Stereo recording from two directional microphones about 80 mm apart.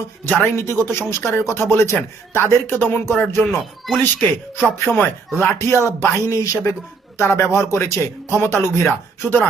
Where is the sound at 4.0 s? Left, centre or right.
Left.